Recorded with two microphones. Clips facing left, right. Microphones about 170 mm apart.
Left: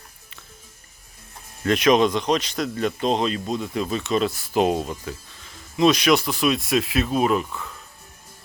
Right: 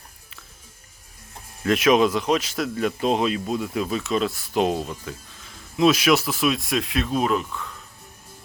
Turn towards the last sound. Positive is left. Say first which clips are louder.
# left 2 dB
turn(degrees=5)  # may be behind; listen again after turning